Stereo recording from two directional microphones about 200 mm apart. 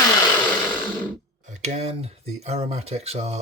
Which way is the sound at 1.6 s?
30° right (ahead or behind).